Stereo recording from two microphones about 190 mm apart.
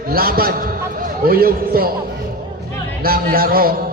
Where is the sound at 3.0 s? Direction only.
50° right (ahead or behind).